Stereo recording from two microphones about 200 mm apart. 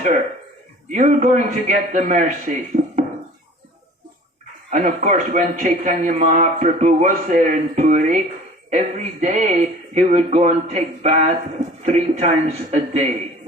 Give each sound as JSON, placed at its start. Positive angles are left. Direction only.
{"t": 0.9, "sound": "a man's voice", "side_deg": -40}
{"t": 4.7, "sound": "a man's voice", "side_deg": -40}